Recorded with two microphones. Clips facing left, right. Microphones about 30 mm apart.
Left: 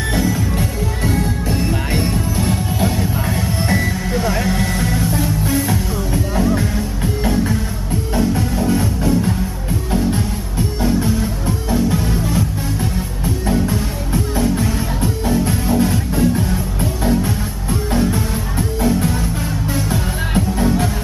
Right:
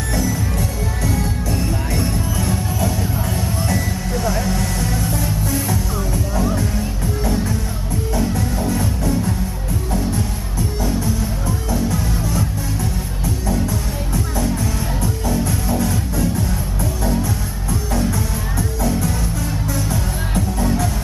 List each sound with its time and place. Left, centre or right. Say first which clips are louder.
0.1 s music: left 2 dB; left
10.8 s music: left 5 dB; left